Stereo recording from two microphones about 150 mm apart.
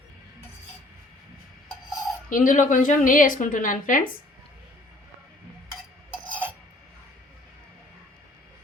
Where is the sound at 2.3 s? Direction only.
60° left (ahead or behind).